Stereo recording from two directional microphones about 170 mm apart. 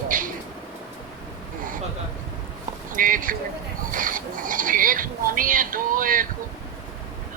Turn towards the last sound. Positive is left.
turn(degrees=-55)  # may be behind; listen again after turning